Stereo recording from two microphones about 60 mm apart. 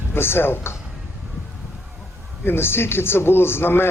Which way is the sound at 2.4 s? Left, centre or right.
Left.